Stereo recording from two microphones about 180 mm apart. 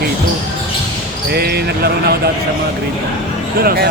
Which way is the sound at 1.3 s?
60° right (ahead or behind).